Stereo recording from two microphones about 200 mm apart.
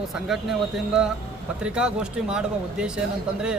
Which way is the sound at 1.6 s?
5° right (ahead or behind).